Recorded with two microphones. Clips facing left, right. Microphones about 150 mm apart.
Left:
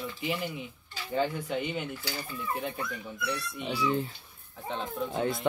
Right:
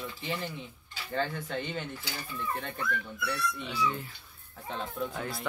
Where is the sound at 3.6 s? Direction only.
30° left (ahead or behind).